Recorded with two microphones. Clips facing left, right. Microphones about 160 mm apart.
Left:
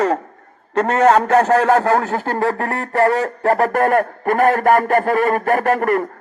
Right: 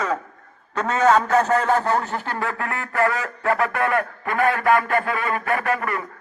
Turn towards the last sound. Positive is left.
turn(degrees=50)  # may be behind; listen again after turning